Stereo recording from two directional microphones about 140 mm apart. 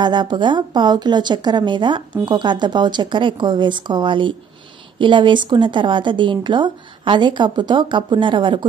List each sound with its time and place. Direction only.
0.0 s a woman's voice: 30° right (ahead or behind)